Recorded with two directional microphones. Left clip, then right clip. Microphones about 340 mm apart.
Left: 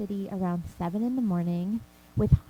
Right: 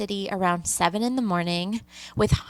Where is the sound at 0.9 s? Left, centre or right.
Centre.